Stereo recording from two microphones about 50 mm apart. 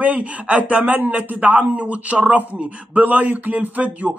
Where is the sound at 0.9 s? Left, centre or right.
Right.